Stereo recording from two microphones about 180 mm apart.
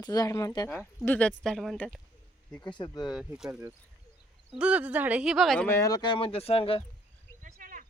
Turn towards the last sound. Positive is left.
turn(degrees=-45)  # may be behind; listen again after turning